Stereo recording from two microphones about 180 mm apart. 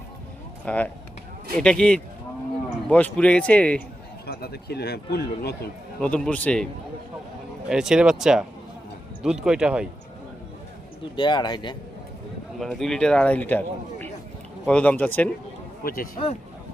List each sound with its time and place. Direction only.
0.6 s a man's voice: 5° left (ahead or behind)
4.3 s a man's voice: 60° left (ahead or behind)
6.0 s a man's voice: 5° left (ahead or behind)
7.7 s a man's voice: 5° right (ahead or behind)
11.2 s speech: 25° left (ahead or behind)
12.5 s a man's voice: centre (ahead or behind)
15.8 s a man's voice: 55° left (ahead or behind)